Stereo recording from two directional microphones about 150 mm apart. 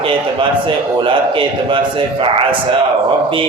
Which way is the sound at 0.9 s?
35° right (ahead or behind).